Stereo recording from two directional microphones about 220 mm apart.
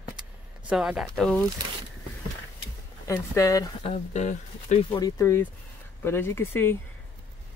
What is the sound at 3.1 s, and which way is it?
Speech, 15° left (ahead or behind).